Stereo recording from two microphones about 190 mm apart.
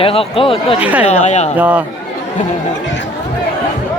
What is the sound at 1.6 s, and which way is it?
Speech, 5° right (ahead or behind).